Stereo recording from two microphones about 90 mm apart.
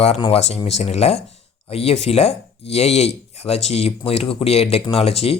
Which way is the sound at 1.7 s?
90° left.